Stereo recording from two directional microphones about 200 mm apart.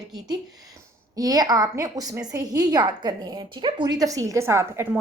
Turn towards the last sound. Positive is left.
turn(degrees=-10)  # may be behind; listen again after turning